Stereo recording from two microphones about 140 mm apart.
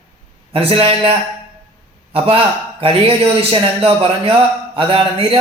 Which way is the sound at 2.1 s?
40° right (ahead or behind).